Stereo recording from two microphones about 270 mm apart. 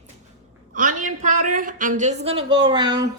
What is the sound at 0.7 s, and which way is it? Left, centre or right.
A woman's voice, right.